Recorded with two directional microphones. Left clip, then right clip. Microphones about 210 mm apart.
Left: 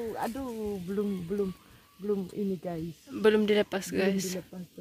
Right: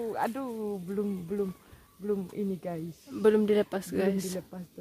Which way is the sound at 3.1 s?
5° right (ahead or behind).